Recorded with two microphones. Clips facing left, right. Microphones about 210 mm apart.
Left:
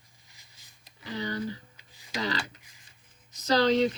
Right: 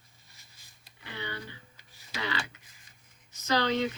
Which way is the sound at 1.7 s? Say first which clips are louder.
Left 1 dB; 15° left (ahead or behind).